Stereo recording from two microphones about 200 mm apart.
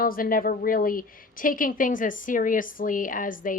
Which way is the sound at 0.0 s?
45° left (ahead or behind).